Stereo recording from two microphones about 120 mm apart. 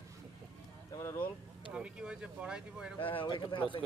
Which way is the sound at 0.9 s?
20° left (ahead or behind).